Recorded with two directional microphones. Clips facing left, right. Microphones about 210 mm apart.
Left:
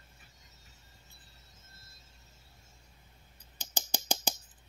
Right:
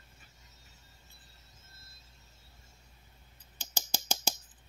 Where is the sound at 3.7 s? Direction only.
15° left (ahead or behind).